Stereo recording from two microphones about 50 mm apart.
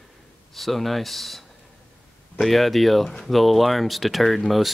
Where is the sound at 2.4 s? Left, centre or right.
Centre.